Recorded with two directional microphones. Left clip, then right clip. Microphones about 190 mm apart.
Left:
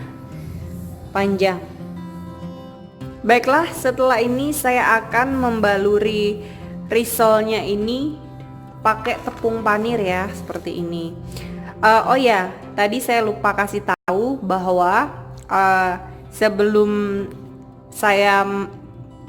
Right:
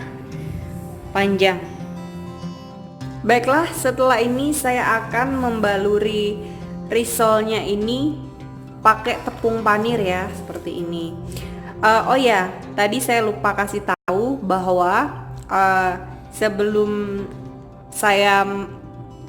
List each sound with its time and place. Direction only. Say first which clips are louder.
1.1 s a woman's voice: right 1 dB; 5° left (ahead or behind)
3.2 s a woman's voice: left 1 dB; 15° left (ahead or behind)
18.0 s a woman's voice: even; 10° left (ahead or behind)